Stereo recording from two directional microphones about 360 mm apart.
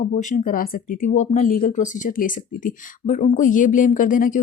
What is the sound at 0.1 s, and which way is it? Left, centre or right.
Speech, left.